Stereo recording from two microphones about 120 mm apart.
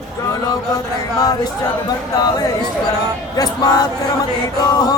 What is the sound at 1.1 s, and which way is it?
Speech, 30° left (ahead or behind).